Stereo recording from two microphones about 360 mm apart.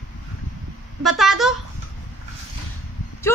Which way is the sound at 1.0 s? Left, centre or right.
Centre.